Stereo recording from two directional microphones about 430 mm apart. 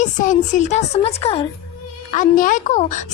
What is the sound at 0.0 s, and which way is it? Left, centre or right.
A woman's voice, centre.